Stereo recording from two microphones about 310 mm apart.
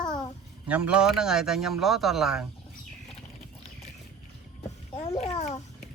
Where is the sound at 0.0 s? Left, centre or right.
Centre.